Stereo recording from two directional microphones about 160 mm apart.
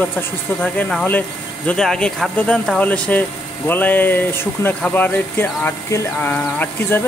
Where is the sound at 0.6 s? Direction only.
10° left (ahead or behind).